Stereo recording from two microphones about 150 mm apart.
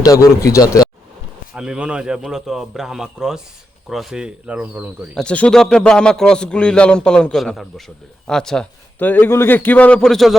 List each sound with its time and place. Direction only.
0.0 s a man's voice: 20° left (ahead or behind)
1.5 s a man's voice: 5° right (ahead or behind)
5.1 s a man's voice: 10° left (ahead or behind)